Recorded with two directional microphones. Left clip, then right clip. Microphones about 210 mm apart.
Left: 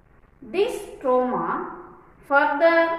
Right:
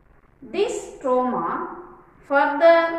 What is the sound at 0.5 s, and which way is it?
A woman's voice, 15° left (ahead or behind).